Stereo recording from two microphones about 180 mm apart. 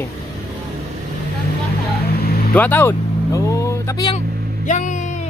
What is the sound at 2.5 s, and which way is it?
Speech, 10° left (ahead or behind).